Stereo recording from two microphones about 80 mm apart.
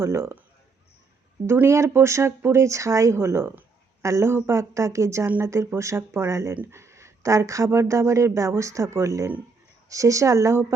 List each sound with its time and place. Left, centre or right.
0.0 s speech: right
1.6 s speech: right